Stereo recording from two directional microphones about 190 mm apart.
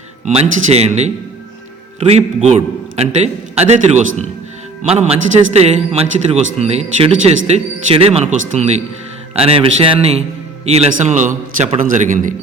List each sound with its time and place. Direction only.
0.7 s a man's voice: 35° right (ahead or behind)